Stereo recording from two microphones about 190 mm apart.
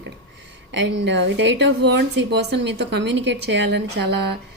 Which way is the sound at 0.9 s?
65° right (ahead or behind).